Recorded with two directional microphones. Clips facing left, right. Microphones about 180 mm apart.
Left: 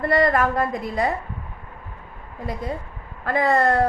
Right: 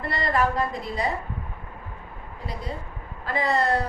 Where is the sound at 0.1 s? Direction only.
50° left (ahead or behind).